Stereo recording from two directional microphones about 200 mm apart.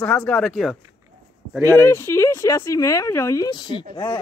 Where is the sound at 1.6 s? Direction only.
15° left (ahead or behind).